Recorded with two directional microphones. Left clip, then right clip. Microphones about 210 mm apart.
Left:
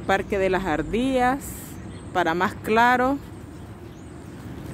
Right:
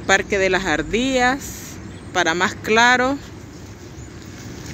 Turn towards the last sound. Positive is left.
turn(degrees=10)  # may be behind; listen again after turning